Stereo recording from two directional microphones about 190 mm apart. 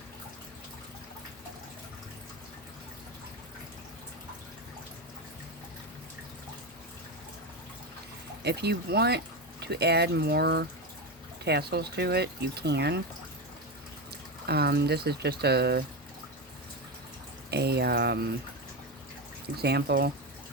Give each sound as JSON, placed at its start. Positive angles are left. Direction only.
{"t": 8.4, "sound": "speech", "side_deg": -55}
{"t": 14.4, "sound": "speech", "side_deg": -55}
{"t": 17.5, "sound": "speech", "side_deg": -60}
{"t": 19.5, "sound": "speech", "side_deg": -60}